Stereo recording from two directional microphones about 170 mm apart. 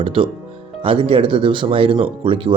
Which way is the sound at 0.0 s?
30° right (ahead or behind).